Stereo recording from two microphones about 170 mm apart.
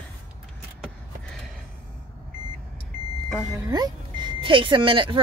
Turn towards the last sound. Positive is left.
turn(degrees=-30)  # may be behind; listen again after turning